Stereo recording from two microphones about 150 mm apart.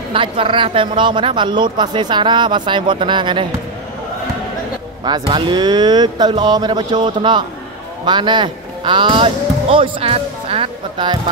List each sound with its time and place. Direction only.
0.1 s speech: 35° right (ahead or behind)
5.0 s speech: 30° right (ahead or behind)